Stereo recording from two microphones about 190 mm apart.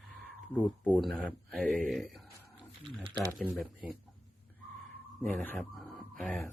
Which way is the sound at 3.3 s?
5° right (ahead or behind).